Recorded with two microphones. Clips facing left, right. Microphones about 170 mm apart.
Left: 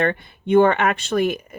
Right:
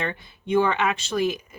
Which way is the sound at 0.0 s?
55° left (ahead or behind).